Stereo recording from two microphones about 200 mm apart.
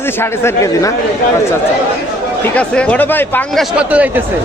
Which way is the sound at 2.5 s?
5° left (ahead or behind).